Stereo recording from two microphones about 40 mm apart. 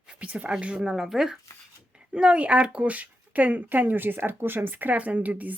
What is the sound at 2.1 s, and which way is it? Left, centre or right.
Speech, right.